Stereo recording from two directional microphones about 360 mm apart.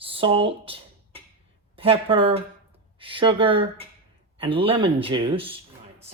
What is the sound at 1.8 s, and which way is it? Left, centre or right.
Speech, centre.